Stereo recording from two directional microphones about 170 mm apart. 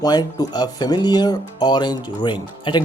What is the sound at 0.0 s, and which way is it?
Speech, 25° left (ahead or behind).